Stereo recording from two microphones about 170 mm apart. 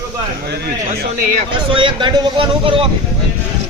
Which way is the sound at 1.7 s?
30° right (ahead or behind).